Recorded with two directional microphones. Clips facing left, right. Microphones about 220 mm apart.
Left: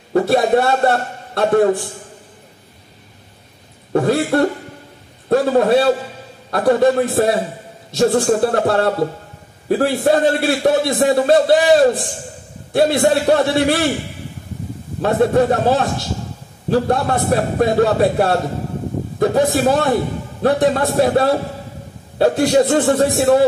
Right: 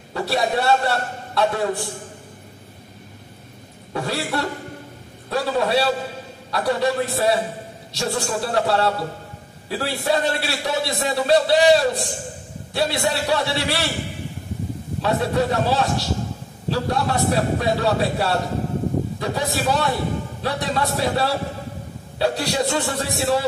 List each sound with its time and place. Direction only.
0.1 s a man's voice: 50° left (ahead or behind)
3.9 s chuckle: 50° left (ahead or behind)
5.3 s a man's voice: 50° left (ahead or behind)
15.0 s a man's voice: 50° left (ahead or behind)